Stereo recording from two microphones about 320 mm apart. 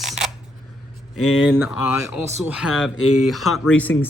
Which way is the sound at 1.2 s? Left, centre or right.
Left.